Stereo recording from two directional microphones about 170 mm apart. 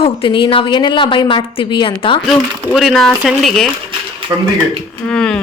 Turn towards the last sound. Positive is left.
turn(degrees=5)  # may be behind; listen again after turning